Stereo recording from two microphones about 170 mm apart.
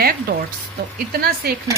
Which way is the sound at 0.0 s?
60° right (ahead or behind).